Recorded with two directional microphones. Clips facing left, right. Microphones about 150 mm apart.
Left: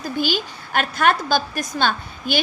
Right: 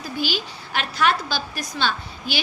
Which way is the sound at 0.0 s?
50° left (ahead or behind).